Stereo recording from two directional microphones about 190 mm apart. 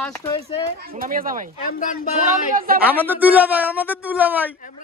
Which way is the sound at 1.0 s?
45° right (ahead or behind).